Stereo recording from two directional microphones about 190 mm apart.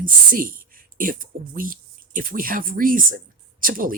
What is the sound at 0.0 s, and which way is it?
Speech, 50° right (ahead or behind).